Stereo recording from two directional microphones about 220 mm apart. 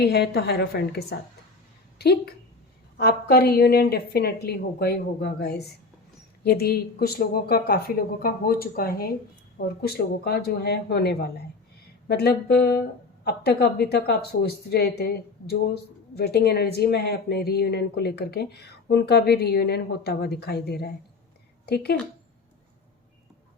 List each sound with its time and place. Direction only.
0.0 s a woman's voice: 45° left (ahead or behind)